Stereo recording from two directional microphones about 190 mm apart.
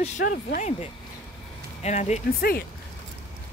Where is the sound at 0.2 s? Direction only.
45° left (ahead or behind).